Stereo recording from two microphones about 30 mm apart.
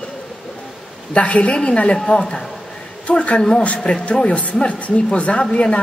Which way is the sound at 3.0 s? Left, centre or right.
Left.